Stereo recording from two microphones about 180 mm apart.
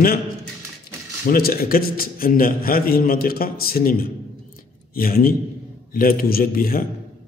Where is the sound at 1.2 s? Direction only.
55° left (ahead or behind).